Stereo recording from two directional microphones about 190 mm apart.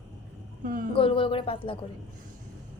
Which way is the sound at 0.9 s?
30° left (ahead or behind).